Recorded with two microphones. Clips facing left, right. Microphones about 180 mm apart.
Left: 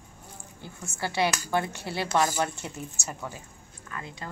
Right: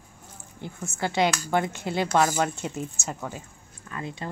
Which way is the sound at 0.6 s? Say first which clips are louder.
Right 4 dB; 20° right (ahead or behind).